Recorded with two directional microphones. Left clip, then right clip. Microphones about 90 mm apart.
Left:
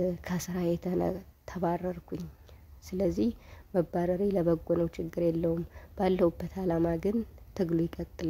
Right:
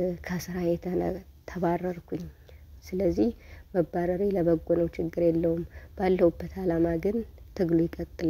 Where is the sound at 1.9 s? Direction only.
Centre (ahead or behind).